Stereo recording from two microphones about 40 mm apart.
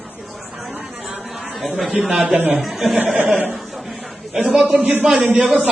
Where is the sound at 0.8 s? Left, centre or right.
Centre.